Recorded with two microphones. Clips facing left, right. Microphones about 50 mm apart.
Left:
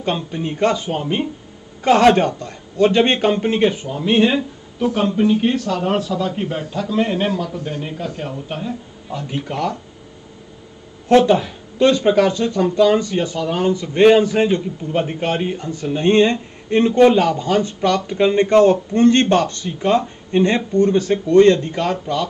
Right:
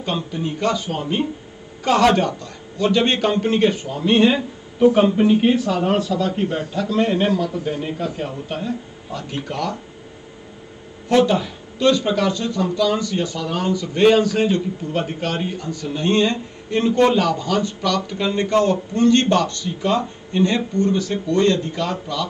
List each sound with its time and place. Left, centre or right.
0.0 s speech: left
2.0 s a man's voice: left
3.3 s a man's voice: centre
4.8 s speech: centre
11.1 s a man's voice: centre
11.8 s speech: left